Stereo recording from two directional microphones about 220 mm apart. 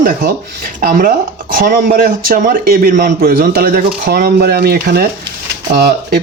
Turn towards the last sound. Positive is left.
turn(degrees=-45)  # may be behind; listen again after turning